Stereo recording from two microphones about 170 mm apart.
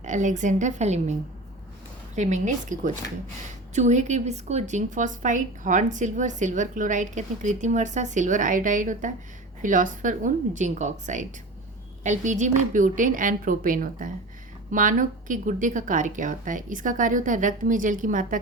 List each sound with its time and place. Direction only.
0.0 s a woman's voice: 45° right (ahead or behind)
2.1 s a woman's voice: 45° right (ahead or behind)